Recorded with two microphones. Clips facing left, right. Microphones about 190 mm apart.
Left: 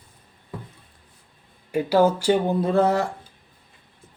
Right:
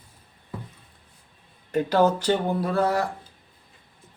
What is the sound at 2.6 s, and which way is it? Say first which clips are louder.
Speech: left 4 dB; 25° left (ahead or behind).